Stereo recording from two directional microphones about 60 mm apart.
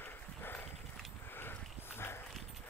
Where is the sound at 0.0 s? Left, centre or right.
Left.